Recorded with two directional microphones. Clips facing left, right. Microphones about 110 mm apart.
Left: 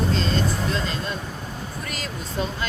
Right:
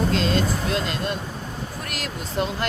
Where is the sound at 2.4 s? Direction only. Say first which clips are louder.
Right 3 dB; 65° right (ahead or behind).